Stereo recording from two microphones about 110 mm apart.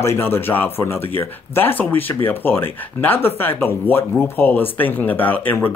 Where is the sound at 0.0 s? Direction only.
25° left (ahead or behind).